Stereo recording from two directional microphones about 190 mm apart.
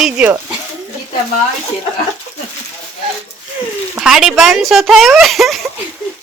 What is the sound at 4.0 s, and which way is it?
Speech, centre (ahead or behind).